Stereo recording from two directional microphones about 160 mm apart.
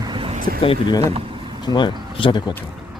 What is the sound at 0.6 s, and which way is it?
Speech, 30° left (ahead or behind).